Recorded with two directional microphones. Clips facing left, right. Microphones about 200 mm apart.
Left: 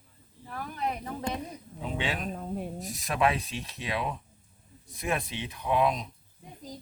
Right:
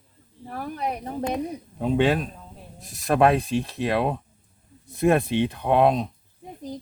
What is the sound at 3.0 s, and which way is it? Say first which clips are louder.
Speech: right 9 dB; 55° right (ahead or behind).